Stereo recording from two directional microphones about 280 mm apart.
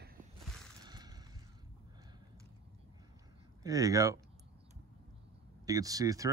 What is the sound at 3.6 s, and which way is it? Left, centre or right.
Speech, centre.